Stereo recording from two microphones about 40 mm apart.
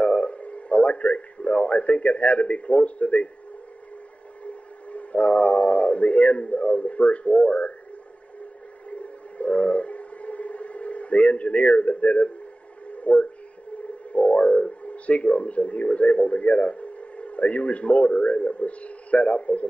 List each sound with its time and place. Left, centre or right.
0.0 s a man's voice: left
4.5 s speech: left
8.9 s whale vocalization: left
12.9 s speech: left